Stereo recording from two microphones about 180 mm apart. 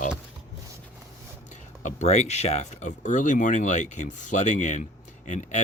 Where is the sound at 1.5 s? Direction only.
40° left (ahead or behind).